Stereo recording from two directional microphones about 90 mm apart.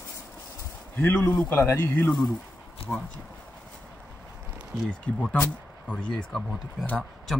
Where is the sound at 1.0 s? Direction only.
20° left (ahead or behind).